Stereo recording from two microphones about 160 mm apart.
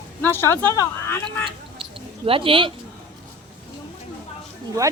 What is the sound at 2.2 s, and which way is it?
Speech, 35° right (ahead or behind).